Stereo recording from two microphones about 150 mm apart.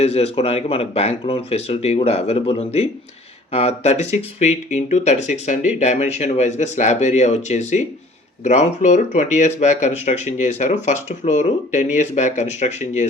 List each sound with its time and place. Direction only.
0.0 s speech: 45° left (ahead or behind)